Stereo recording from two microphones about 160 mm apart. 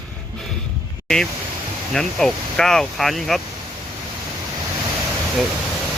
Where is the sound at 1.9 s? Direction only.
5° left (ahead or behind).